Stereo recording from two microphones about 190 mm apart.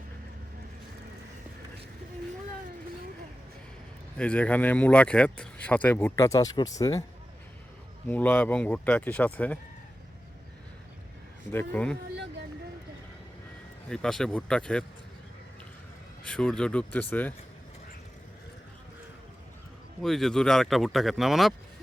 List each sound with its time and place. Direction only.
4.2 s speech: 5° left (ahead or behind)
8.0 s speech: 10° left (ahead or behind)
11.5 s speech: 5° left (ahead or behind)
13.9 s speech: 5° left (ahead or behind)
16.2 s speech: 5° left (ahead or behind)
20.0 s speech: centre (ahead or behind)